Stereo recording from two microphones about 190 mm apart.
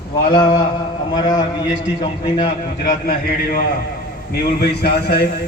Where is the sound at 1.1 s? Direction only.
20° left (ahead or behind).